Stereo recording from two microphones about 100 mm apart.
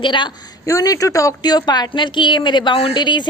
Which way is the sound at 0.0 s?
55° left (ahead or behind).